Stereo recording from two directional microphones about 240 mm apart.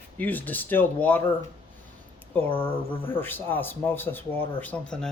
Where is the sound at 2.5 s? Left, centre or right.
Left.